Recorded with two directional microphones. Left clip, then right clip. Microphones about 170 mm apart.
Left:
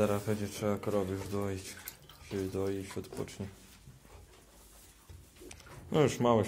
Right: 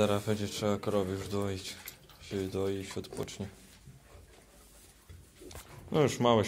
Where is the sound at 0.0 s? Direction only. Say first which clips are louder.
Right 2 dB; 5° right (ahead or behind).